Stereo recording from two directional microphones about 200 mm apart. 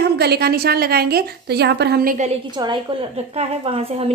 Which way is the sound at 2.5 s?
25° right (ahead or behind).